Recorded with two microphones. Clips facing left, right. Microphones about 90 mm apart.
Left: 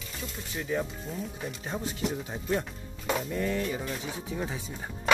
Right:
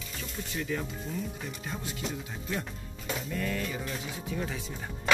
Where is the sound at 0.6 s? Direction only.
20° left (ahead or behind).